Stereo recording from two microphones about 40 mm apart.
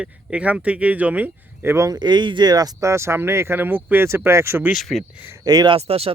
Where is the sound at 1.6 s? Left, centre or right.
Right.